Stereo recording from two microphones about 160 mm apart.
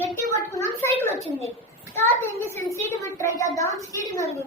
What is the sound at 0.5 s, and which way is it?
A woman's voice, 15° left (ahead or behind).